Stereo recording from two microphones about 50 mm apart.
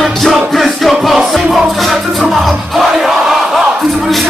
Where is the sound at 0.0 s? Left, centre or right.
Centre.